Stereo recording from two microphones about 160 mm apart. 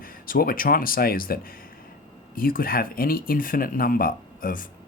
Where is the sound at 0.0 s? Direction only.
65° left (ahead or behind).